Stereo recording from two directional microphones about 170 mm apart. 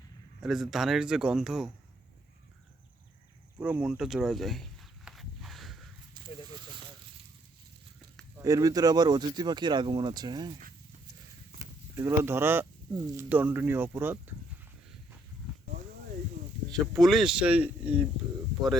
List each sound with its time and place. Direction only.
0.4 s speech: centre (ahead or behind)
3.6 s speech: 10° right (ahead or behind)
5.0 s walk: centre (ahead or behind)
6.2 s snake: 25° right (ahead or behind)
8.4 s speech: 20° right (ahead or behind)
11.9 s speech: 15° right (ahead or behind)
16.7 s speech: centre (ahead or behind)